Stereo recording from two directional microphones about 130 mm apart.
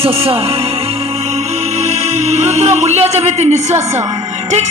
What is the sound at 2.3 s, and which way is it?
Music, 55° right (ahead or behind).